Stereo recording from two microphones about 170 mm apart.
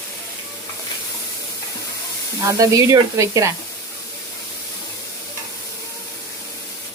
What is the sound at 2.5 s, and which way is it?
Speech, 20° right (ahead or behind).